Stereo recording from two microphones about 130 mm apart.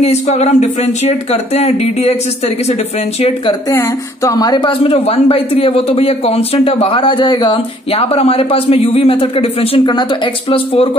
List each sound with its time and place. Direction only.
0.0 s speech: 55° left (ahead or behind)
3.7 s speech: 20° left (ahead or behind)
4.8 s speech: 50° left (ahead or behind)